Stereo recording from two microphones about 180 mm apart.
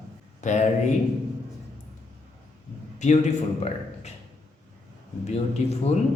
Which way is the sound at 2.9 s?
40° left (ahead or behind).